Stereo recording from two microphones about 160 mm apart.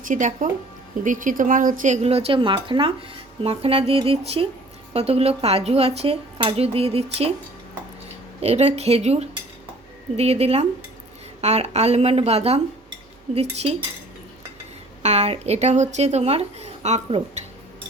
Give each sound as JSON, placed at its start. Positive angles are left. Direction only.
{"t": 0.0, "sound": "a woman's voice", "side_deg": -50}
{"t": 8.4, "sound": "a woman's voice", "side_deg": -40}
{"t": 15.0, "sound": "a woman's voice", "side_deg": -40}